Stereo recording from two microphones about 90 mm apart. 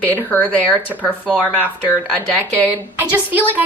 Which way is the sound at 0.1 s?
20° left (ahead or behind).